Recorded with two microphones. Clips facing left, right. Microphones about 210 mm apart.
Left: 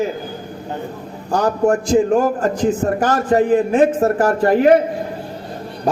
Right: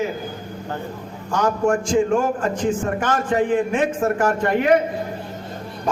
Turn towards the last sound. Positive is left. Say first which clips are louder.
# left 5 dB
turn(degrees=35)  # may be behind; listen again after turning